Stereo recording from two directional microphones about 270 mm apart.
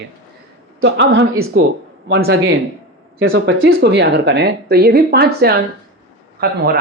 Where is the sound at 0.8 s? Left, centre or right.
Right.